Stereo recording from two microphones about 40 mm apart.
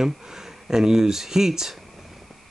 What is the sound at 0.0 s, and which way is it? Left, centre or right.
Speech, centre.